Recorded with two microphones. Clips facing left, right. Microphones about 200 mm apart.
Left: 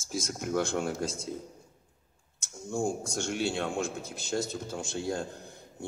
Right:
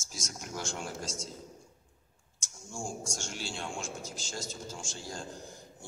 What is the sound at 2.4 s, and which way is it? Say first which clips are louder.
A man's voice: left 10 dB; 60° left (ahead or behind).